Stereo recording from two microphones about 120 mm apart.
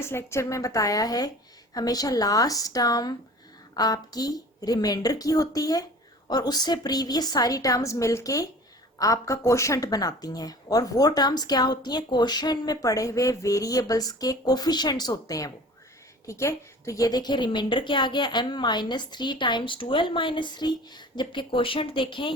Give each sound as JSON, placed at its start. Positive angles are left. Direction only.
{"t": 0.0, "sound": "a woman's voice", "side_deg": 20}